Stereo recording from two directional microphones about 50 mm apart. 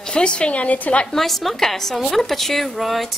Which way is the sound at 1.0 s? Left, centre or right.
Centre.